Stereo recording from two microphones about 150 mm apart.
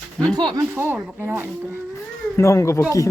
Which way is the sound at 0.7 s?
15° right (ahead or behind).